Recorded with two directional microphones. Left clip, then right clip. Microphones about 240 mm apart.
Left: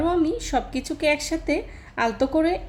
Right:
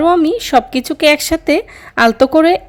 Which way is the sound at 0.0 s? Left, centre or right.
Right.